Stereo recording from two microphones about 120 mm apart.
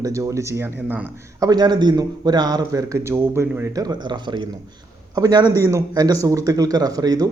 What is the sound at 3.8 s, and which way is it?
Speech, 40° right (ahead or behind).